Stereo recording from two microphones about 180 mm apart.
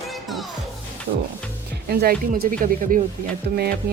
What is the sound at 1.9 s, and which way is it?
Speech, 55° right (ahead or behind).